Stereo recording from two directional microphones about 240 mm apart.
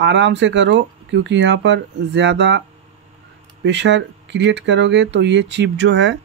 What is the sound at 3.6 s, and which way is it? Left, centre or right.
Speech, right.